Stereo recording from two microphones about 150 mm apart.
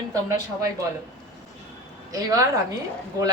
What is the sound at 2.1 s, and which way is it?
Speech, 25° right (ahead or behind).